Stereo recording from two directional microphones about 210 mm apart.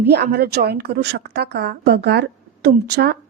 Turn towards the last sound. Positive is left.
turn(degrees=-50)  # may be behind; listen again after turning